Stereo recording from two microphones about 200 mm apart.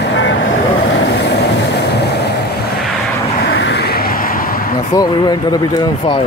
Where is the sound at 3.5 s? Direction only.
60° left (ahead or behind).